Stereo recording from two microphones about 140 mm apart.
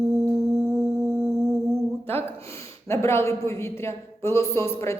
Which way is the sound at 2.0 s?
15° left (ahead or behind).